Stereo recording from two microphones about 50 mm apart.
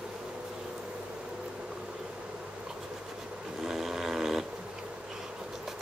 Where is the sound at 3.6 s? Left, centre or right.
Centre.